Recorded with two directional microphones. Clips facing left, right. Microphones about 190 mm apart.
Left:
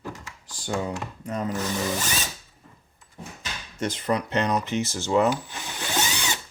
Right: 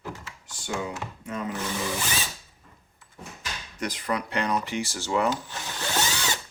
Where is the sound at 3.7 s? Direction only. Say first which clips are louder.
Left 4 dB; 25° left (ahead or behind).